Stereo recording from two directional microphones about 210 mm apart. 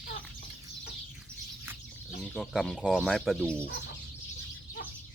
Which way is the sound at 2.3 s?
Centre (ahead or behind).